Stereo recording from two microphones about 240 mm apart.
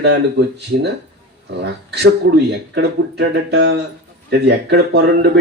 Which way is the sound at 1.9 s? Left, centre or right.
Right.